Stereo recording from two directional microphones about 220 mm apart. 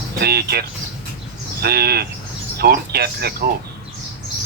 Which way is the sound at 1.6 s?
45° right (ahead or behind).